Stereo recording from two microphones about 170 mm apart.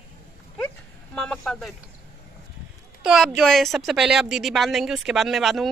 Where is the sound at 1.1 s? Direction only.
5° left (ahead or behind).